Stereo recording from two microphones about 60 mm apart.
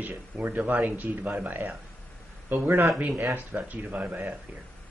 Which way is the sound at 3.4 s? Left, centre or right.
Right.